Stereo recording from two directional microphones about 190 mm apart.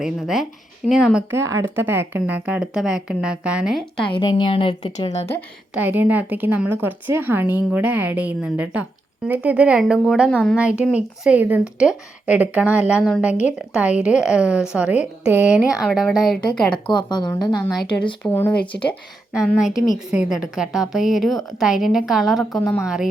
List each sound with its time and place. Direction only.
0.0 s a woman's voice: centre (ahead or behind)
4.0 s a woman's voice: 25° left (ahead or behind)
5.7 s a woman's voice: 10° right (ahead or behind)
16.7 s a woman's voice: 25° left (ahead or behind)
18.2 s speech: 10° left (ahead or behind)
18.7 s a woman's voice: 25° left (ahead or behind)
19.5 s a woman's voice: centre (ahead or behind)
22.4 s a woman's voice: 20° left (ahead or behind)
22.8 s a woman's voice: 5° right (ahead or behind)